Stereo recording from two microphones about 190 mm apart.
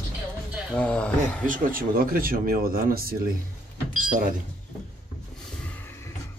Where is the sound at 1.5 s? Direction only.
50° right (ahead or behind).